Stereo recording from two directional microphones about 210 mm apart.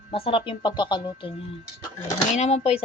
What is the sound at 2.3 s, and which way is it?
Speech, 30° left (ahead or behind).